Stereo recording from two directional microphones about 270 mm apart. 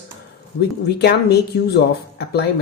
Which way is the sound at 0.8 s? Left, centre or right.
Left.